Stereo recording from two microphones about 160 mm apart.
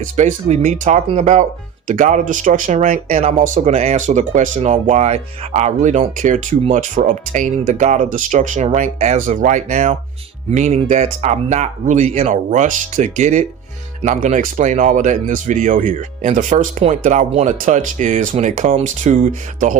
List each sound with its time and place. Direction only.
0.0 s speech: 50° right (ahead or behind)